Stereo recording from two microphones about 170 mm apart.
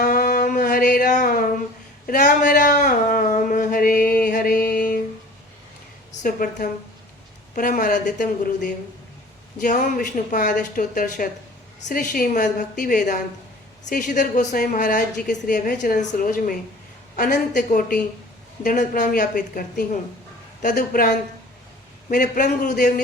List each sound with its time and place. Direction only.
0.0 s music: 55° left (ahead or behind)
2.0 s a sound: 50° left (ahead or behind)
6.2 s a woman's voice: 55° left (ahead or behind)
22.1 s a woman's voice: 50° left (ahead or behind)